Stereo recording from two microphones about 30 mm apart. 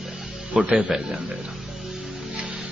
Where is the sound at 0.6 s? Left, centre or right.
Right.